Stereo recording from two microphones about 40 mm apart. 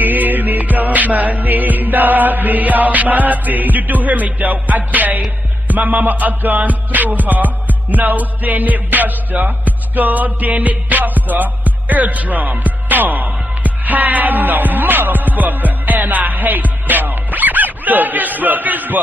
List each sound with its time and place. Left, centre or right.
0.0 s music: right